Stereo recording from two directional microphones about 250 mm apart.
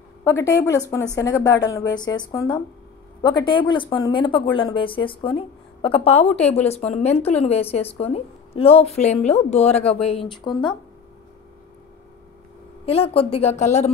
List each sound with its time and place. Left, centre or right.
0.2 s a woman's voice: centre
12.8 s a woman's voice: left